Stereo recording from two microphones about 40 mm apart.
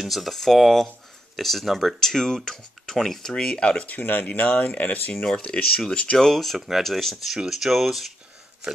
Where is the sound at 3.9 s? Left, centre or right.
Left.